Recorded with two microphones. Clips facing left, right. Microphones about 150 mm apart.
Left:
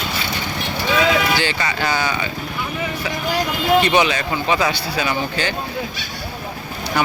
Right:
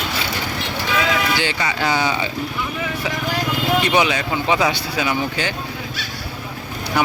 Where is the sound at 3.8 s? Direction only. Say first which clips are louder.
Left 1 dB; 10° right (ahead or behind).